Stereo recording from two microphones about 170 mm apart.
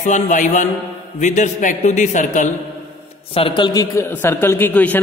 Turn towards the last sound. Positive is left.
turn(degrees=10)  # may be behind; listen again after turning